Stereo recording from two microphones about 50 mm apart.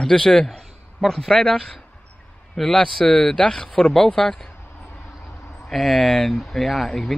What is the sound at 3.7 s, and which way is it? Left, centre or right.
Speech, centre.